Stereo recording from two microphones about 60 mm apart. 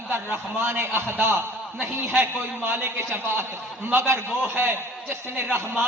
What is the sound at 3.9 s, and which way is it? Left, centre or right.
A man's voice, right.